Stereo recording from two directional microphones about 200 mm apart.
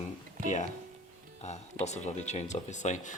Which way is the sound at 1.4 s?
35° left (ahead or behind).